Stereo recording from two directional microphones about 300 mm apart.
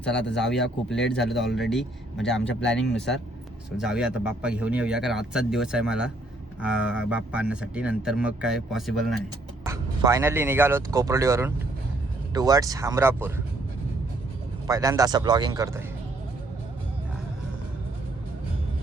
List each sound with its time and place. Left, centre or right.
0.0 s speech: centre
2.5 s speech: left
2.7 s speech: centre
9.6 s speech: centre
14.7 s speech: centre